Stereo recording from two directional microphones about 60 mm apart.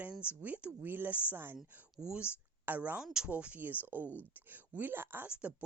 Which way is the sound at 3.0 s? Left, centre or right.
Centre.